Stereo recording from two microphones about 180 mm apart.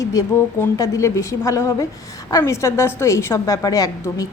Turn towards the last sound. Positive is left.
turn(degrees=20)  # may be behind; listen again after turning